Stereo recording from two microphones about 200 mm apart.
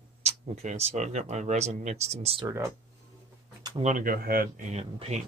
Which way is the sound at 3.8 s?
40° right (ahead or behind).